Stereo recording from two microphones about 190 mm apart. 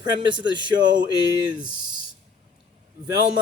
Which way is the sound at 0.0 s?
25° right (ahead or behind).